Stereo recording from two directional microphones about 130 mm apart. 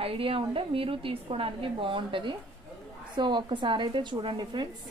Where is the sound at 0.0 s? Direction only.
45° right (ahead or behind).